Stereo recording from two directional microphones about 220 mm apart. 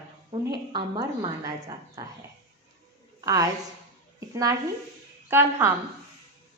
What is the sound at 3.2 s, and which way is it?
A woman's voice, 15° right (ahead or behind).